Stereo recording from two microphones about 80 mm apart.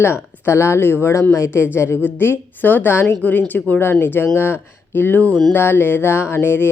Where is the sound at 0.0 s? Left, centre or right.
Left.